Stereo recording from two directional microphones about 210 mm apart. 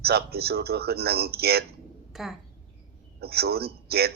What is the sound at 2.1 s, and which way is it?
Speech, centre (ahead or behind).